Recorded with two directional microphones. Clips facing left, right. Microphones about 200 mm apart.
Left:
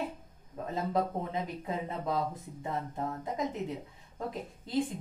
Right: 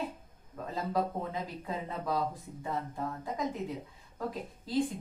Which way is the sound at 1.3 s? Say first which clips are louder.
Left 2 dB; 20° left (ahead or behind).